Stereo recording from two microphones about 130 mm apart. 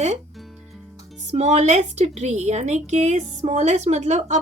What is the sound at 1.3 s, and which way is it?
A woman's voice, 60° right (ahead or behind).